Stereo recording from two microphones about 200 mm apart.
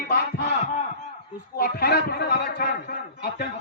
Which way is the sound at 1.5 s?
50° left (ahead or behind).